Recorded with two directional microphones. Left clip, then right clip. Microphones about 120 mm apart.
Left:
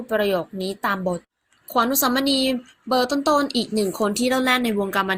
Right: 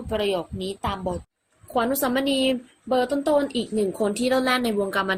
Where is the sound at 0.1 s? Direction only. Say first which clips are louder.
Left 3 dB; 25° left (ahead or behind).